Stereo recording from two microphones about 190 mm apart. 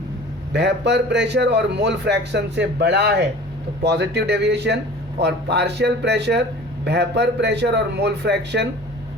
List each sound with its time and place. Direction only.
0.5 s a man's voice: 65° right (ahead or behind)